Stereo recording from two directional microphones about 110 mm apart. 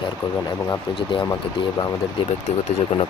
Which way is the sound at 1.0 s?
50° left (ahead or behind).